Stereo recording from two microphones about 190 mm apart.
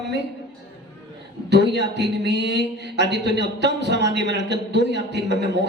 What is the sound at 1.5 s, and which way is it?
A man's voice, 65° right (ahead or behind).